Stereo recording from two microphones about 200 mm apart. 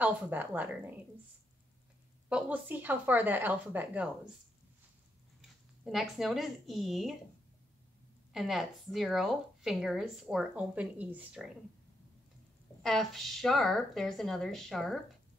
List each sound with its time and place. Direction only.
0.0 s speech: 10° right (ahead or behind)
2.2 s speech: 5° right (ahead or behind)
5.9 s speech: centre (ahead or behind)
8.3 s speech: centre (ahead or behind)
12.8 s speech: centre (ahead or behind)